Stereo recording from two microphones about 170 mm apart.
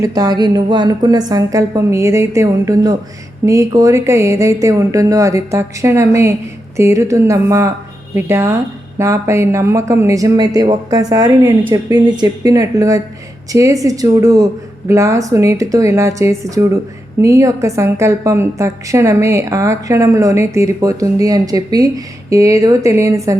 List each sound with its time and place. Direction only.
0.0 s a woman's voice: 20° right (ahead or behind)